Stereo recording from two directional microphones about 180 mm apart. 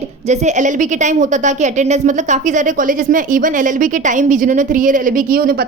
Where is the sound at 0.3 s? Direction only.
40° right (ahead or behind).